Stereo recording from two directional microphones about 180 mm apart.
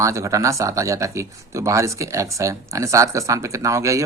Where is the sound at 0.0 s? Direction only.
15° right (ahead or behind).